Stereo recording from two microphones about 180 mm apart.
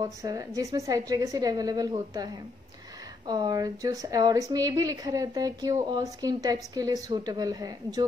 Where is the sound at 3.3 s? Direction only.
20° right (ahead or behind).